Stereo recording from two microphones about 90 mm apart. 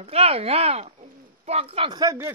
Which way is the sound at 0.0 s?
90° right.